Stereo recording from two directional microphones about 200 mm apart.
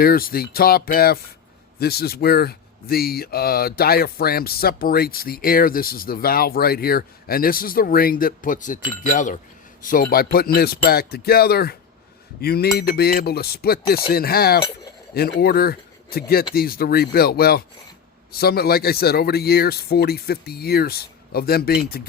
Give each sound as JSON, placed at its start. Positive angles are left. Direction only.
{"t": 0.0, "sound": "speech", "side_deg": 50}